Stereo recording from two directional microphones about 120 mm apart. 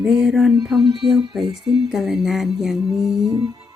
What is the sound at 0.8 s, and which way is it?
Music, 40° right (ahead or behind).